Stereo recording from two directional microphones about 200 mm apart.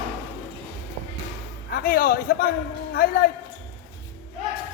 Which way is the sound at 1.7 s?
50° left (ahead or behind).